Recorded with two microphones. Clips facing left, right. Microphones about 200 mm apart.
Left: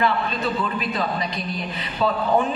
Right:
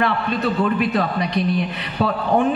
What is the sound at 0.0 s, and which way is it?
A woman's voice, 65° right (ahead or behind).